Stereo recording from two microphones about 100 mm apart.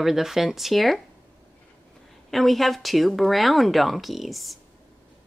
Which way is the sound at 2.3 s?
Centre (ahead or behind).